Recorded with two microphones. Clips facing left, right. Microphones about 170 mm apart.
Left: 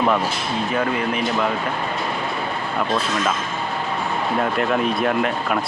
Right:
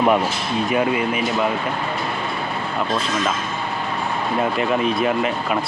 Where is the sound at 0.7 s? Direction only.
10° right (ahead or behind).